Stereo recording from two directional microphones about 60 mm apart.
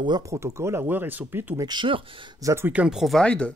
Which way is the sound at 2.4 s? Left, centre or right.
Right.